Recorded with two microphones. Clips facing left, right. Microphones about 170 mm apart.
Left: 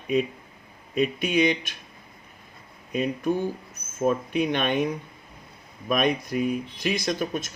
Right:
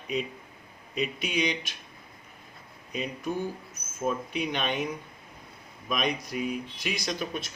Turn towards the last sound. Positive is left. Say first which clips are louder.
# left 5 dB
turn(degrees=45)  # may be behind; listen again after turning